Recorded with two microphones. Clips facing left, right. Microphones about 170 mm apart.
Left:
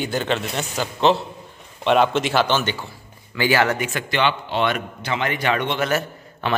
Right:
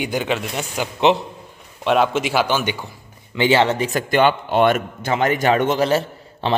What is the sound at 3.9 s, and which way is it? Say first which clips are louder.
A man's voice: right 5 dB; 45° right (ahead or behind).